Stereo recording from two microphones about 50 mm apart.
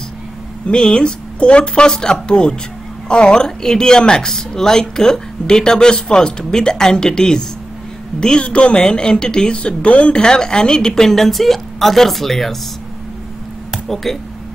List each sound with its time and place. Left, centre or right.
0.7 s a woman's voice: centre
10.1 s a woman's voice: centre
13.8 s speech: centre